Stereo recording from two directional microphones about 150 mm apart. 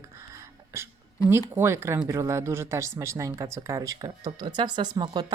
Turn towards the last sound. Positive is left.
turn(degrees=-30)  # may be behind; listen again after turning